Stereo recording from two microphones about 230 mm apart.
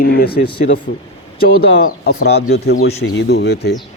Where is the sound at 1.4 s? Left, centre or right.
Left.